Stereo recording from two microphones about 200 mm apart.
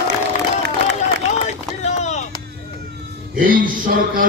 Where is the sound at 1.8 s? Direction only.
35° left (ahead or behind).